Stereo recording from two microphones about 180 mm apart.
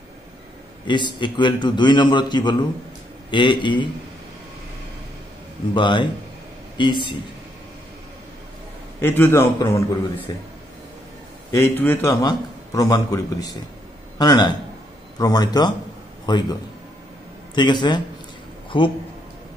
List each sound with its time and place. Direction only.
0.8 s a man's voice: 25° left (ahead or behind)
5.8 s a man's voice: 25° left (ahead or behind)
9.0 s a man's voice: 10° left (ahead or behind)
11.5 s a man's voice: 10° left (ahead or behind)
17.6 s a man's voice: 25° left (ahead or behind)